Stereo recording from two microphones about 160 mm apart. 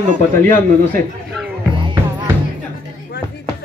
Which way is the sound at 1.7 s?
30° right (ahead or behind).